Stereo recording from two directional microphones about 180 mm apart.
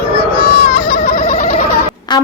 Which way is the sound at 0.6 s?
55° left (ahead or behind).